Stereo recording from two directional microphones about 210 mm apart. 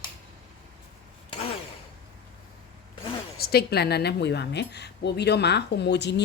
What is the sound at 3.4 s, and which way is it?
A woman's voice, 50° left (ahead or behind).